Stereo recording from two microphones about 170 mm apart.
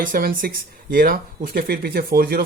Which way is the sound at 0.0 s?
55° right (ahead or behind).